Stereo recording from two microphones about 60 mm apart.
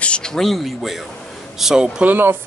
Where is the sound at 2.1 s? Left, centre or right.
Right.